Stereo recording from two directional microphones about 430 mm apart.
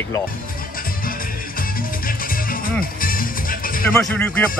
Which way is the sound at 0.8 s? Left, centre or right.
Centre.